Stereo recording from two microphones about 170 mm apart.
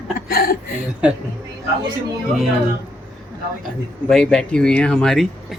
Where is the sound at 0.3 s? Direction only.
60° left (ahead or behind).